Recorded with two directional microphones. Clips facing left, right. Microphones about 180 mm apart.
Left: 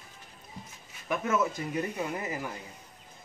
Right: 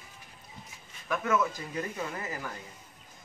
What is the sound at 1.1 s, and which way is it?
Speech, 25° left (ahead or behind).